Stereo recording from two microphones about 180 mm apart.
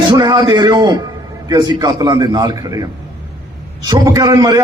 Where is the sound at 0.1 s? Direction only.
25° right (ahead or behind).